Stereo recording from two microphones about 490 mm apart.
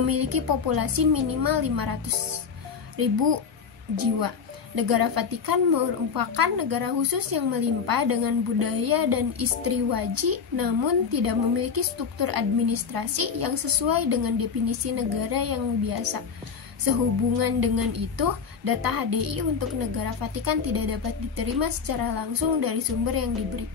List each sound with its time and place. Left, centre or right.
0.0 s a woman's voice: right
3.9 s a woman's voice: right
17.4 s a woman's voice: right